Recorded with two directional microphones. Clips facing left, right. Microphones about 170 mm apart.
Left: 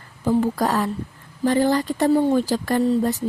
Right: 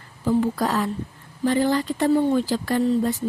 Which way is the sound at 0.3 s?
45° left (ahead or behind).